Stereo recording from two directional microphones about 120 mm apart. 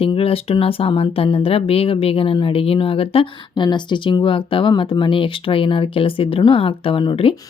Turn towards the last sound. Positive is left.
turn(degrees=45)  # may be behind; listen again after turning